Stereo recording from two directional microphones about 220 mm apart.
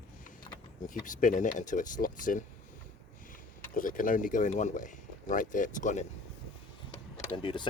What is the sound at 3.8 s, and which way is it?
Speech, 40° left (ahead or behind).